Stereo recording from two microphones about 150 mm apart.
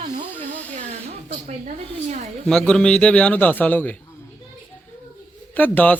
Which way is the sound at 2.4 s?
5° left (ahead or behind).